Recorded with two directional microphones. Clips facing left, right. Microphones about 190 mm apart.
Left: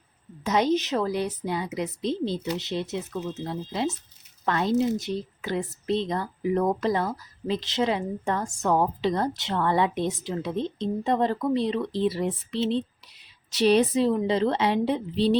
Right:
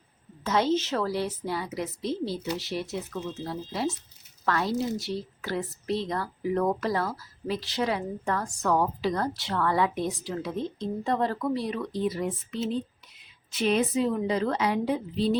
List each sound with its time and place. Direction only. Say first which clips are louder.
0.4 s speech: left 2 dB; 15° left (ahead or behind)